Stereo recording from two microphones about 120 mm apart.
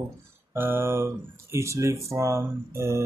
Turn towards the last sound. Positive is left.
turn(degrees=-25)  # may be behind; listen again after turning